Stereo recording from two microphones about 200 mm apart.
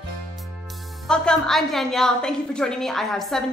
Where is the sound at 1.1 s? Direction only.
5° left (ahead or behind).